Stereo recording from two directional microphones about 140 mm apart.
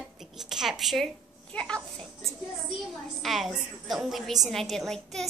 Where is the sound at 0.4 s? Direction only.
5° right (ahead or behind).